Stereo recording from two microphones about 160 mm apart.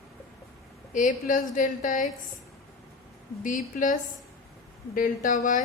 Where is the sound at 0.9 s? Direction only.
55° left (ahead or behind).